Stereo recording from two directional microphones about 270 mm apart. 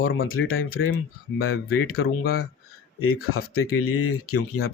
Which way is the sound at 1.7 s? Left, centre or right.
Left.